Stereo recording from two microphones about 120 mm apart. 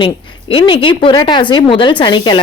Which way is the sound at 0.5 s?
45° left (ahead or behind).